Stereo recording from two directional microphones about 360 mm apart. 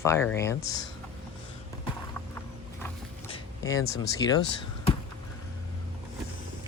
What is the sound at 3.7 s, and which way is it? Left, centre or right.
Speech, left.